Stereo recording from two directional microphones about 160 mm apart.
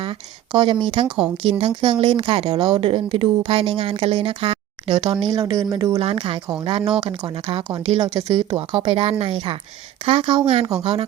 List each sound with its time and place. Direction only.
0.0 s speech: 30° right (ahead or behind)
1.0 s a woman's voice: 5° right (ahead or behind)
1.4 s speech: 35° right (ahead or behind)
6.0 s speech: 35° right (ahead or behind)
7.5 s speech: 35° right (ahead or behind)
8.0 s speech: 25° right (ahead or behind)